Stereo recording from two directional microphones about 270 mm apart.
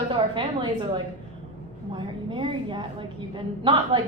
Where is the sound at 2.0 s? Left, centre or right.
Centre.